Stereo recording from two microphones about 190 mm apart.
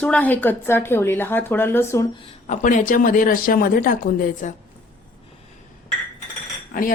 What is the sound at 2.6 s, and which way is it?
Speech, 45° left (ahead or behind).